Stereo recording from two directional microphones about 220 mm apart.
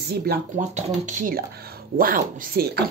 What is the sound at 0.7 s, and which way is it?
Speech, 35° right (ahead or behind).